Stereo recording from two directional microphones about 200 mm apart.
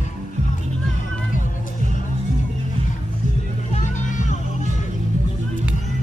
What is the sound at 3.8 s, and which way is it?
Music, 40° left (ahead or behind).